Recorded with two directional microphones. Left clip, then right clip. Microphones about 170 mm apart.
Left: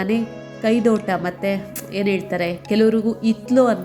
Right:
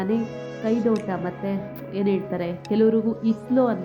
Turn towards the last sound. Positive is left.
turn(degrees=20)  # may be behind; listen again after turning